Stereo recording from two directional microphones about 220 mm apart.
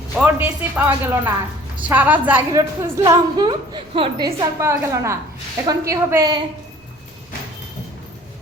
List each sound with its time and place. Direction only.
0.2 s a woman's voice: 5° right (ahead or behind); by 4.1 s 25° right (ahead or behind)
4.3 s a woman's voice: 15° right (ahead or behind)